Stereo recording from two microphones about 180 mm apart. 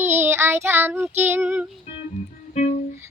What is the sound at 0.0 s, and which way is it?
Child singing, 15° right (ahead or behind).